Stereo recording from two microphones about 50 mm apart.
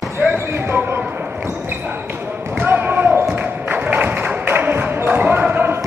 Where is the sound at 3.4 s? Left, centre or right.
Right.